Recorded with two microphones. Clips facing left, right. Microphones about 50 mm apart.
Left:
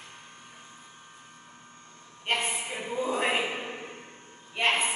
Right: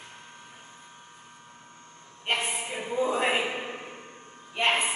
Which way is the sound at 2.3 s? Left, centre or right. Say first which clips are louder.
Even; centre.